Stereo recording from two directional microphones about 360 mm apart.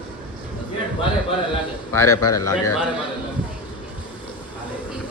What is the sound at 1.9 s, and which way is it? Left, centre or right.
Speech, centre.